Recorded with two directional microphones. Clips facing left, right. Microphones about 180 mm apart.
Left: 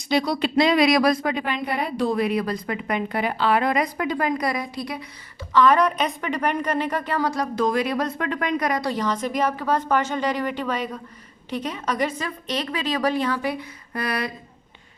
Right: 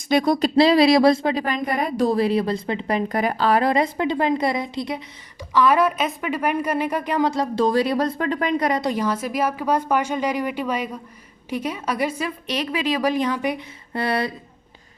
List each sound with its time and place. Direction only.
0.1 s a woman's voice: 50° right (ahead or behind); by 3.0 s 30° right (ahead or behind)
3.1 s a woman's voice: 45° right (ahead or behind); by 5.0 s 25° right (ahead or behind)
5.5 s a woman's voice: 10° right (ahead or behind)
9.0 s a woman's voice: 5° right (ahead or behind); by 14.3 s 30° right (ahead or behind)